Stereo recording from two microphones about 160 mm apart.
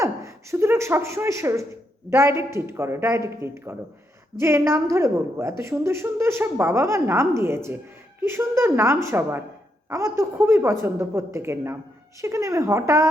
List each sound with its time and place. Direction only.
0.0 s a woman's voice: 20° right (ahead or behind)